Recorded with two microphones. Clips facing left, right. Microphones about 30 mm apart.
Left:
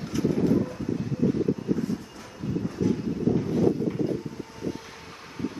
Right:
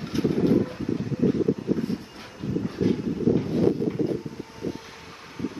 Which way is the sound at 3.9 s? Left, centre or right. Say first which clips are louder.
Right 1 dB; centre.